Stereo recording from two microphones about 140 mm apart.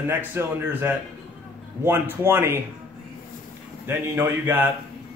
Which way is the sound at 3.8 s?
15° right (ahead or behind).